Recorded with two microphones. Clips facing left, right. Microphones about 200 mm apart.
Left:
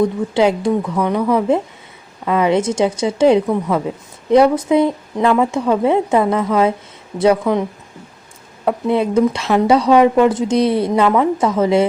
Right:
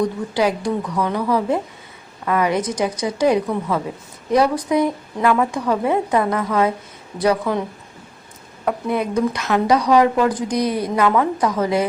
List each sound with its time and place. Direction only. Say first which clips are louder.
0.0 s speech: left 5 dB; 25° left (ahead or behind)
8.6 s speech: left 5 dB; 25° left (ahead or behind)